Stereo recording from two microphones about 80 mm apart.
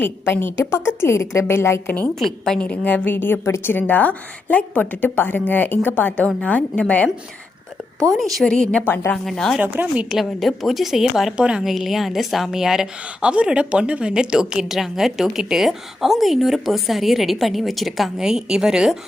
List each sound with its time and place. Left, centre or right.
0.0 s a woman's voice: left
2.1 s a woman's voice: centre; by 3.4 s left
3.4 s a woman's voice: left
3.8 s a woman's voice: left
8.1 s a woman's voice: centre
8.4 s a woman's voice: centre
9.6 s speech: right
10.2 s a woman's voice: centre